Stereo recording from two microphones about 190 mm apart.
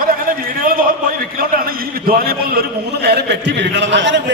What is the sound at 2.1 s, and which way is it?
A man's voice, 50° right (ahead or behind).